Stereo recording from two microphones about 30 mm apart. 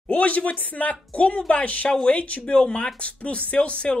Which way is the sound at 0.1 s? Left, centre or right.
Left.